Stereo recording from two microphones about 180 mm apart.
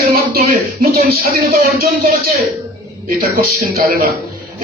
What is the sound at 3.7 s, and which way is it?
Speech, 55° right (ahead or behind).